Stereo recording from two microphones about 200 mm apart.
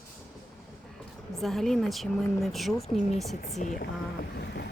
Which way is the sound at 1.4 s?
Centre (ahead or behind).